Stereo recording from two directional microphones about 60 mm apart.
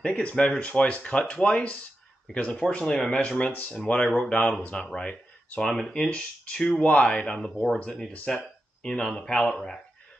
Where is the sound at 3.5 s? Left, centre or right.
Left.